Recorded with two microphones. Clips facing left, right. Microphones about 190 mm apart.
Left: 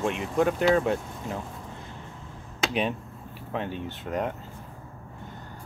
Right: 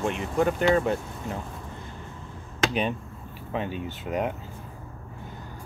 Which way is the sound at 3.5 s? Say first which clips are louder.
Right 1 dB; 5° right (ahead or behind).